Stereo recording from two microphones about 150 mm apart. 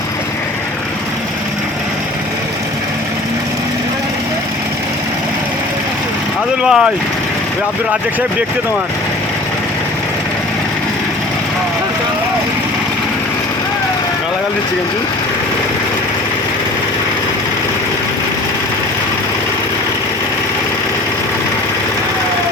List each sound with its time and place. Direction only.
6.6 s speech: 5° right (ahead or behind)